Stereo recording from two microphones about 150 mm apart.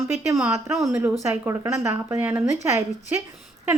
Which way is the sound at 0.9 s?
15° right (ahead or behind).